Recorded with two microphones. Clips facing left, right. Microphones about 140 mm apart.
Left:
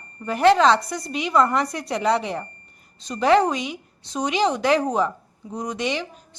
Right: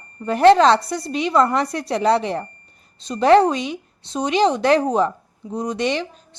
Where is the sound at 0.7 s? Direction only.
30° right (ahead or behind).